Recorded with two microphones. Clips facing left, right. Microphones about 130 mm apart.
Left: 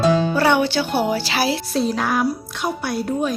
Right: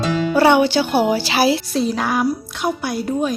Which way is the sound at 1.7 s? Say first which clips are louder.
Right 1 dB; centre (ahead or behind).